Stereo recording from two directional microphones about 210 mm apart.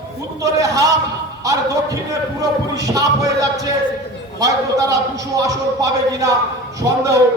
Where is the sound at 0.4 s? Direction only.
15° right (ahead or behind).